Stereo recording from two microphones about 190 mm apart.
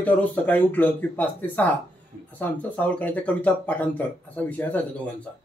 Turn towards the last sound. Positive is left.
turn(degrees=10)  # may be behind; listen again after turning